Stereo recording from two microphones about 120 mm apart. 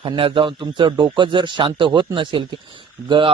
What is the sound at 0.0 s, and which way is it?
A man's voice, 45° right (ahead or behind).